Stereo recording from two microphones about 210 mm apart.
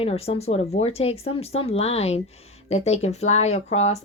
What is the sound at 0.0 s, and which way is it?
A woman's voice, 30° left (ahead or behind).